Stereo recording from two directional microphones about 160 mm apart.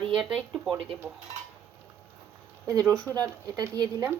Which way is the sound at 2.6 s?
20° right (ahead or behind).